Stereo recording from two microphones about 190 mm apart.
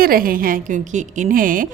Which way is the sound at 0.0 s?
50° right (ahead or behind).